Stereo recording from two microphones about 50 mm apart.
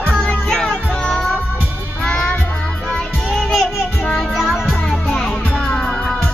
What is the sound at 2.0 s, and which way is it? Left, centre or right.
Child singing, centre.